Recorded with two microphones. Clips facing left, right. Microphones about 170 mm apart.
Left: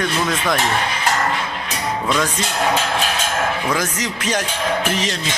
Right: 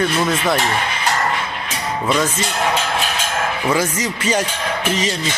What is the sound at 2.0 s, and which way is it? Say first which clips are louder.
Speech: right 3 dB; 5° right (ahead or behind).